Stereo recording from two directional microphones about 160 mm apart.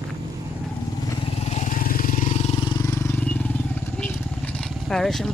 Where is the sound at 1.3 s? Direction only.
45° left (ahead or behind).